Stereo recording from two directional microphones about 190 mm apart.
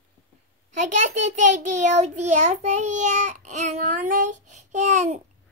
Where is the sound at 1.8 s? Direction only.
40° right (ahead or behind).